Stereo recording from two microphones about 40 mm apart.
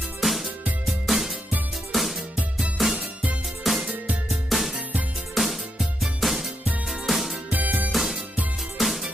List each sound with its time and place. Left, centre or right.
0.2 s music: centre
3.0 s music: right
3.6 s music: centre
7.4 s music: right
7.9 s music: centre